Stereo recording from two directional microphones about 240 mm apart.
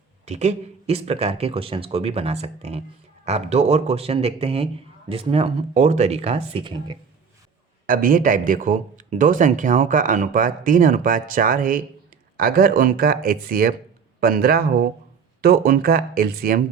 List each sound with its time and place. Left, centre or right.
0.3 s a man's voice: right
7.9 s a man's voice: right